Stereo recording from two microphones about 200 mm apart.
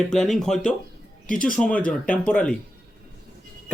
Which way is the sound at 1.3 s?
45° left (ahead or behind).